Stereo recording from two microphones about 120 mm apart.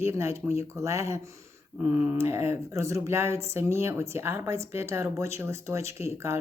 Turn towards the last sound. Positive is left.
turn(degrees=-25)  # may be behind; listen again after turning